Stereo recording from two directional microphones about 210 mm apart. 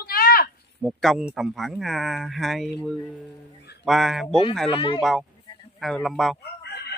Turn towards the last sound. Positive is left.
turn(degrees=50)  # may be behind; listen again after turning